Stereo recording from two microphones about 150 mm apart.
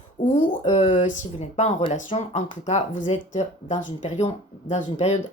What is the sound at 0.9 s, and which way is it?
Speech, 50° left (ahead or behind).